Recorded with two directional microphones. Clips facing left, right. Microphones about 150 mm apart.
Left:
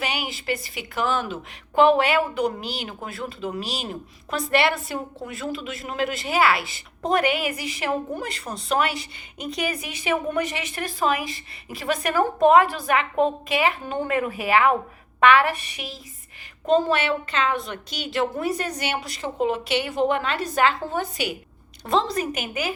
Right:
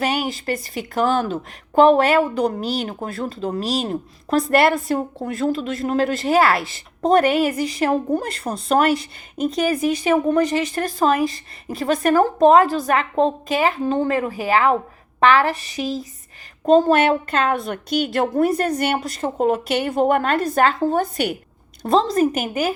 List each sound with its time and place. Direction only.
0.0 s a woman's voice: 45° right (ahead or behind)